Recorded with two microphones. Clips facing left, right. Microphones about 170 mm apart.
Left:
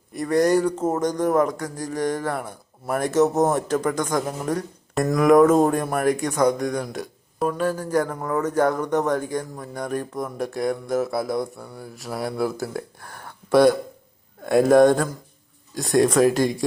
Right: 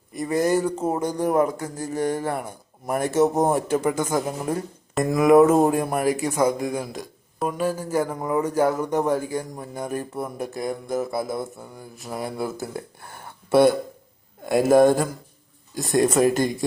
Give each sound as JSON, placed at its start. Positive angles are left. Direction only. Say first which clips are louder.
{"t": 0.1, "sound": "speech", "louder": "left 2 dB", "side_deg": -5}